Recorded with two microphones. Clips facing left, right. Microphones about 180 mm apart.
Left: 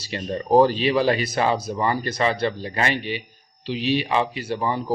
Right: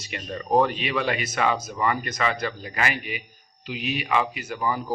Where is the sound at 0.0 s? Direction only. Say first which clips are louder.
Left 6 dB; 30° left (ahead or behind).